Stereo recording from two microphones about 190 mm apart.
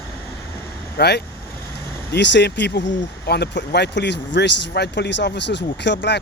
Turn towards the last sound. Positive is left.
turn(degrees=65)  # may be behind; listen again after turning